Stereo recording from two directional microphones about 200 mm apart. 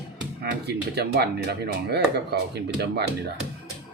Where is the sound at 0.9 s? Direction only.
55° right (ahead or behind).